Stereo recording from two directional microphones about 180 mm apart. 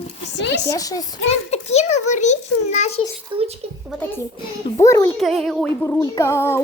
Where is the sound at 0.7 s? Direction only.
20° left (ahead or behind).